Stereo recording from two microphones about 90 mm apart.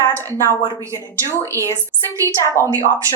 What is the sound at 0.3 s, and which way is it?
Speech, 30° left (ahead or behind).